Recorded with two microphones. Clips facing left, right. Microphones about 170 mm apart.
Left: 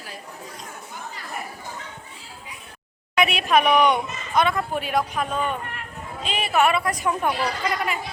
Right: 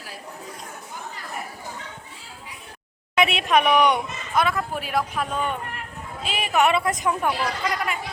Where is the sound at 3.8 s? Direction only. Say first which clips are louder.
Left 1 dB; 10° right (ahead or behind).